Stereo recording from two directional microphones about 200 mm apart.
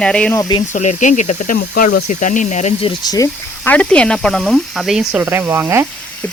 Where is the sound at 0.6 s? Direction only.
40° left (ahead or behind).